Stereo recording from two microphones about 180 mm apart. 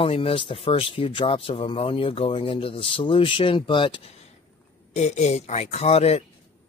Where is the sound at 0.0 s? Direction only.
30° left (ahead or behind).